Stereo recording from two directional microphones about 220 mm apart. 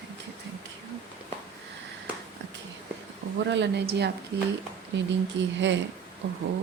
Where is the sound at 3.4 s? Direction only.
55° right (ahead or behind).